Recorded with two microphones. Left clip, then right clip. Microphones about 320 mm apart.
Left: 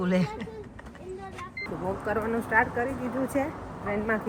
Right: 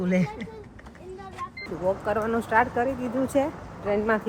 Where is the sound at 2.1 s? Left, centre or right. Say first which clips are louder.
Even; centre.